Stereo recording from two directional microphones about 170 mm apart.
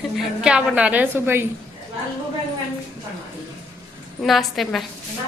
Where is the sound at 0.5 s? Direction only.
5° right (ahead or behind).